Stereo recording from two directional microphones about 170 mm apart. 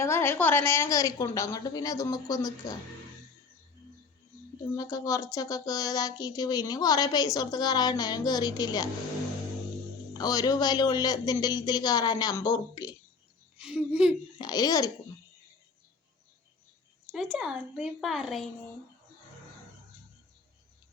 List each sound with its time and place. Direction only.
0.0 s speech: 15° left (ahead or behind)
4.8 s speech: 20° left (ahead or behind)
10.2 s speech: 25° left (ahead or behind)
13.6 s speech: 5° right (ahead or behind)
14.3 s speech: 25° left (ahead or behind)
17.1 s a woman's voice: centre (ahead or behind)